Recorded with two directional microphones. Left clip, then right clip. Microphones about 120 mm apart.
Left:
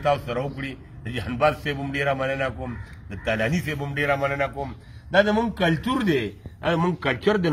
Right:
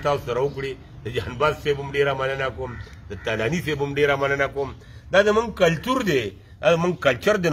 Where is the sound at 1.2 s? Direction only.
20° right (ahead or behind).